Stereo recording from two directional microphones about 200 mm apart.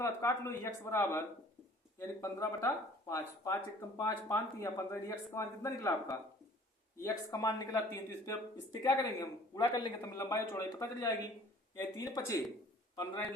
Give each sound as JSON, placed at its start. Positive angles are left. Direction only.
{"t": 0.0, "sound": "speech", "side_deg": 15}